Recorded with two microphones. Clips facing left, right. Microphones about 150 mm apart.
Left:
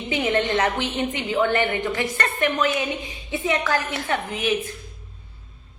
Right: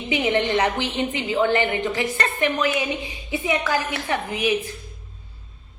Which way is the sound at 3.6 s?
5° right (ahead or behind).